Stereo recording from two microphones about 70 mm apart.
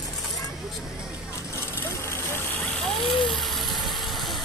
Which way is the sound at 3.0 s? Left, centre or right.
Centre.